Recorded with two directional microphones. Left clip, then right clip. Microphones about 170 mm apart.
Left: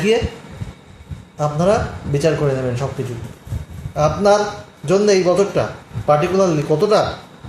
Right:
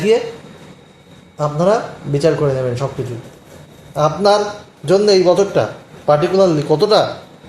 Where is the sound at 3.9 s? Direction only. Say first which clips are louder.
Right 1 dB; 25° right (ahead or behind).